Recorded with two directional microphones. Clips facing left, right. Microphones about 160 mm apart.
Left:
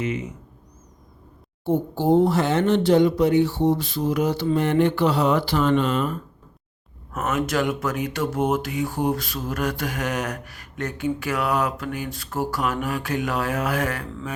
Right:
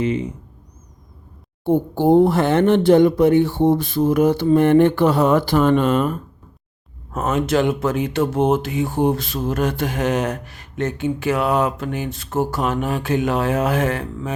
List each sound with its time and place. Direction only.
0.0 s speech: 30° right (ahead or behind)
1.6 s speech: 55° right (ahead or behind)
7.1 s speech: 30° right (ahead or behind)